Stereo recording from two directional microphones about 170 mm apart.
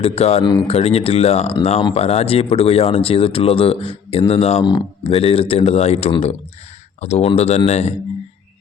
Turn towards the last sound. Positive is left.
turn(degrees=40)  # may be behind; listen again after turning